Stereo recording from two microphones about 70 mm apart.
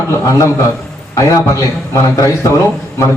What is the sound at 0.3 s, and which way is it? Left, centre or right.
Speech, left.